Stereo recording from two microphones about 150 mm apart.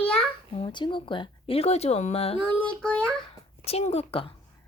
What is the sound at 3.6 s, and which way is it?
Speech, 45° left (ahead or behind).